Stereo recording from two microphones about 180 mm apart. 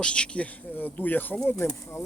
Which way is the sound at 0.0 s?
5° left (ahead or behind).